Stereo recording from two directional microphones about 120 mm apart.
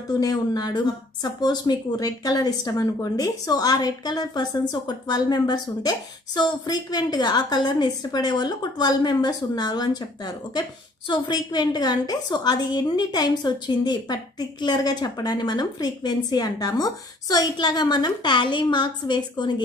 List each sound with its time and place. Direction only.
0.2 s speech: 35° left (ahead or behind)